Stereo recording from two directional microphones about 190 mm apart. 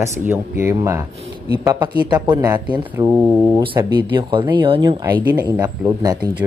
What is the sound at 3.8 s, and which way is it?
Speech, 25° right (ahead or behind).